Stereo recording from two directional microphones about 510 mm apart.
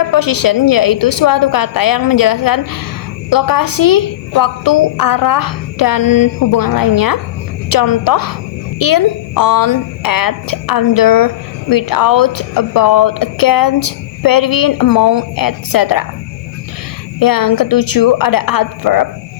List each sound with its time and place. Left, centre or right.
0.1 s a woman's voice: left
17.2 s a woman's voice: left